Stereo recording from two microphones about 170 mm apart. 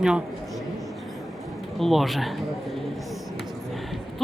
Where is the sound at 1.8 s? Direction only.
Centre (ahead or behind).